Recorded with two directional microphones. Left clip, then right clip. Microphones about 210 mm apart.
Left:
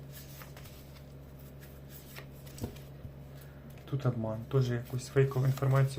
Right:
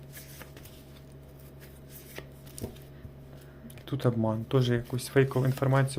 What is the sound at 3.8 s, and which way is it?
Speech, 45° right (ahead or behind).